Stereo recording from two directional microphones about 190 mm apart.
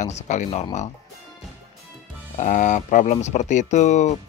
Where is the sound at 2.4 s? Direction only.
40° left (ahead or behind).